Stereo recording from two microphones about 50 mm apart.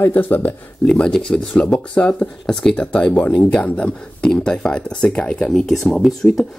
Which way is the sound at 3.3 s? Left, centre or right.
Left.